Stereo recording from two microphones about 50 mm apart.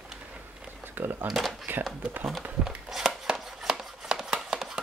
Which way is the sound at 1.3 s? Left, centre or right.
Centre.